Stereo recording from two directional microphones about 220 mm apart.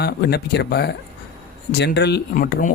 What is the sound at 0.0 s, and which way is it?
Speech, 45° left (ahead or behind).